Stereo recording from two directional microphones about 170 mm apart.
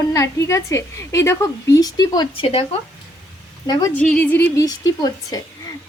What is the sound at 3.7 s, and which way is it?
Speech, 20° left (ahead or behind).